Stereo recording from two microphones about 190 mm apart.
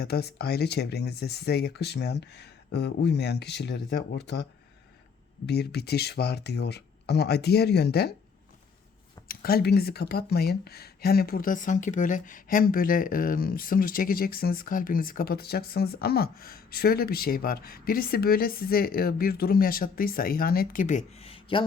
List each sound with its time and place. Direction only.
0.0 s speech: 60° left (ahead or behind)
5.5 s speech: 60° left (ahead or behind)
9.2 s speech: 50° left (ahead or behind); by 21.6 s 30° left (ahead or behind)